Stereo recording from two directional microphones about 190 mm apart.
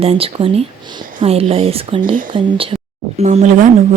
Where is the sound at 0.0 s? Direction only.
30° right (ahead or behind).